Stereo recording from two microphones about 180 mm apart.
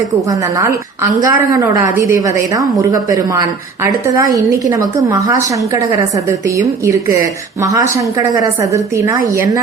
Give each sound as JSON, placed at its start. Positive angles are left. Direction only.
{"t": 0.3, "sound": "a woman's voice", "side_deg": -20}